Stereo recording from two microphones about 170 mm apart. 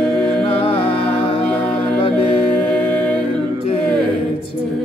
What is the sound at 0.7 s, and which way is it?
Music, 35° left (ahead or behind).